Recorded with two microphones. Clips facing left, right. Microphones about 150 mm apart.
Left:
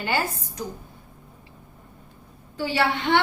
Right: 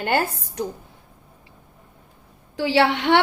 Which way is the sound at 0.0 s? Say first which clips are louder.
Right 4 dB; 55° right (ahead or behind).